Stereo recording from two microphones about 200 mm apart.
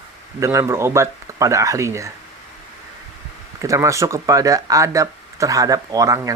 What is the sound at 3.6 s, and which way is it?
Speech, 15° right (ahead or behind).